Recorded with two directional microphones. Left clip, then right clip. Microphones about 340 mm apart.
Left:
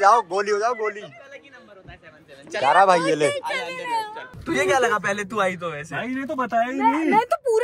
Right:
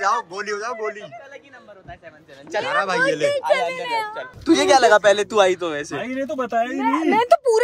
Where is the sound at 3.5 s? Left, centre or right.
Right.